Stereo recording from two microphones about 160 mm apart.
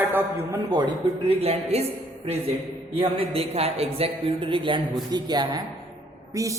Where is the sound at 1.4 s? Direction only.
40° right (ahead or behind).